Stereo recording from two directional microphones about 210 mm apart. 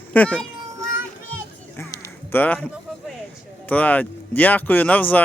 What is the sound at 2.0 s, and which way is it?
Music, 10° left (ahead or behind).